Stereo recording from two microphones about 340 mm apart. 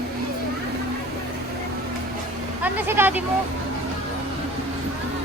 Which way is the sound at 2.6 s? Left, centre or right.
Centre.